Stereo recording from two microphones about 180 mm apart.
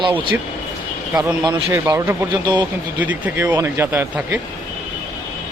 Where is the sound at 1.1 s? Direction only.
10° right (ahead or behind).